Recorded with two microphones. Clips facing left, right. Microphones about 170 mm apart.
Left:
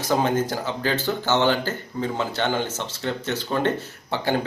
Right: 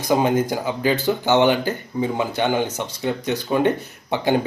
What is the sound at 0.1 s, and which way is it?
Speech, 10° right (ahead or behind).